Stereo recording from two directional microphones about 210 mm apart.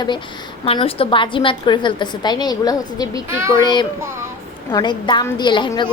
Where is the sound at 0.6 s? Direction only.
25° left (ahead or behind).